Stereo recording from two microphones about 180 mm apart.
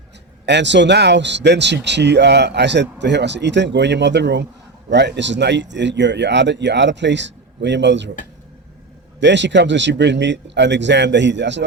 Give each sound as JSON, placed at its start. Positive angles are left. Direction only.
{"t": 0.4, "sound": "speech", "side_deg": -75}
{"t": 9.2, "sound": "a man's voice", "side_deg": -80}